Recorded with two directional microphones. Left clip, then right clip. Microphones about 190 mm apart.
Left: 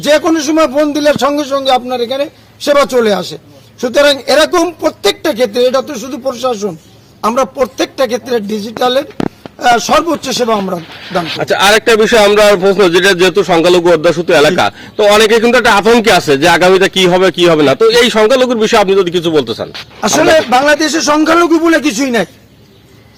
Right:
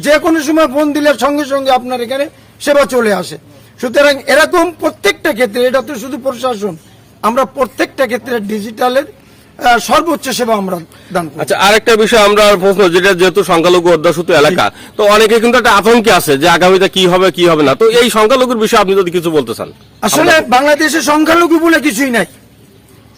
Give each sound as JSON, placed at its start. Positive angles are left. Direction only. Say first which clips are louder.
{"t": 0.2, "sound": "speech", "louder": "even", "side_deg": -5}
{"t": 11.3, "sound": "a man's voice", "louder": "even", "side_deg": 15}
{"t": 20.2, "sound": "speech", "louder": "even", "side_deg": -5}
{"t": 20.7, "sound": "a man's voice", "louder": "even", "side_deg": -25}
{"t": 21.4, "sound": "speech", "louder": "even", "side_deg": 0}